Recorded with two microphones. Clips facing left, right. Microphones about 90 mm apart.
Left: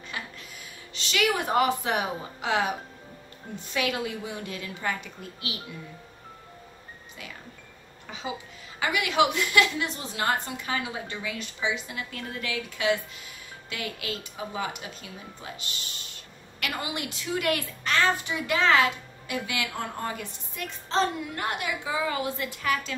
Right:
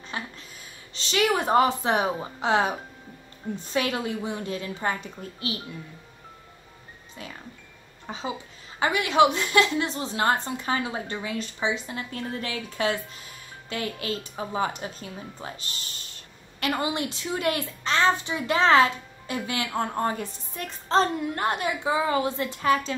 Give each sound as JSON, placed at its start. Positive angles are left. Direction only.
{"t": 0.1, "sound": "a sound", "side_deg": -30}
{"t": 0.9, "sound": "a woman's voice", "side_deg": -30}
{"t": 3.7, "sound": "a woman's voice", "side_deg": -35}
{"t": 8.1, "sound": "a woman's voice", "side_deg": -30}